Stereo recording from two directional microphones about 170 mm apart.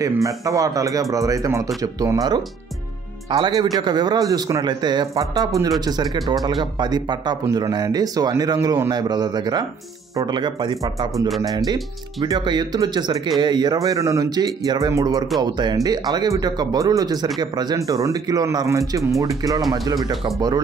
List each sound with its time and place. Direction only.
0.0 s speech: 20° right (ahead or behind)
20.3 s speech: 20° right (ahead or behind)